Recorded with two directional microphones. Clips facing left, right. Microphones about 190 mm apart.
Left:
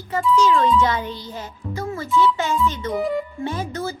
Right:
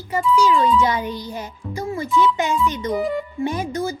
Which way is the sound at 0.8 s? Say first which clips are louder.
Right 1 dB; 10° right (ahead or behind).